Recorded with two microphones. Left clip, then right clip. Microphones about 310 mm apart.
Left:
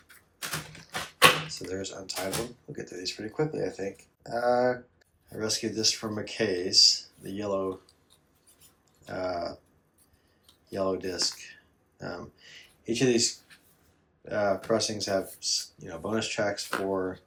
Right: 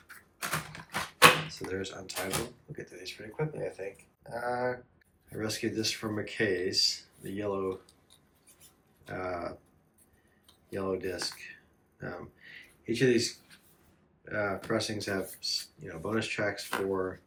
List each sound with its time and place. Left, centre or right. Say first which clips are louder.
0.7 s mechanisms: even; centre
2.7 s speech: left 8 dB; centre
5.3 s speech: left 3 dB; centre
9.0 s speech: left 4 dB; centre
10.4 s a sound: left 5 dB; centre
14.3 s speech: left 6 dB; centre